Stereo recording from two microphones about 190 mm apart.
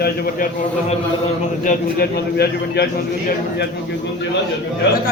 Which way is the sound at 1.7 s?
55° left (ahead or behind).